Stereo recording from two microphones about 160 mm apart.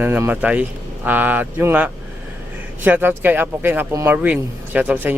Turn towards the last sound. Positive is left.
turn(degrees=-10)  # may be behind; listen again after turning